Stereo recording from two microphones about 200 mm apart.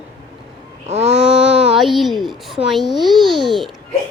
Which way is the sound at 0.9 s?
35° right (ahead or behind).